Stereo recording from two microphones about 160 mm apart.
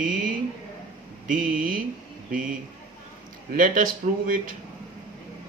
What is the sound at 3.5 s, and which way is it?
Speech, 60° right (ahead or behind).